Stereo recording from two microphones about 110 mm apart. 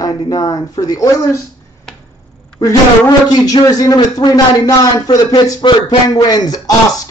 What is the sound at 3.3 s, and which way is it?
A man's voice, 35° left (ahead or behind).